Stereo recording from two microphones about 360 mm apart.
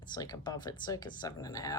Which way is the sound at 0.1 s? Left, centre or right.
Centre.